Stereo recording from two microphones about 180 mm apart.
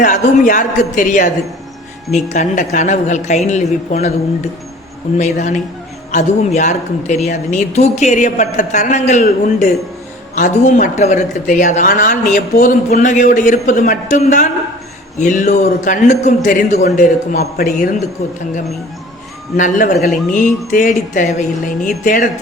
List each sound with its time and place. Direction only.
0.0 s speech: 50° left (ahead or behind)
2.3 s a woman's voice: 45° left (ahead or behind)
5.1 s a woman's voice: 40° left (ahead or behind)
19.5 s speech: 45° left (ahead or behind)